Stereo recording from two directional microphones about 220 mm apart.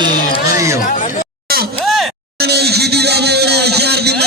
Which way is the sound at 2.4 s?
50° right (ahead or behind).